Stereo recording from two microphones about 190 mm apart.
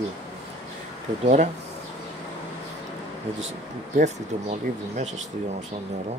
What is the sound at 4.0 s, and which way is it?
Speech, 35° right (ahead or behind).